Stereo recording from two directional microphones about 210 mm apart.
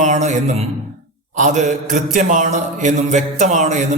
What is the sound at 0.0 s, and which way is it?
Speech, 35° right (ahead or behind).